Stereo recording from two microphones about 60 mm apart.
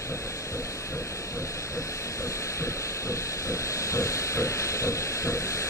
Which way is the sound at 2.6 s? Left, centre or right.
Left.